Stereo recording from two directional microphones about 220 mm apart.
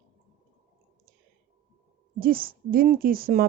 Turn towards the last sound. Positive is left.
turn(degrees=-40)  # may be behind; listen again after turning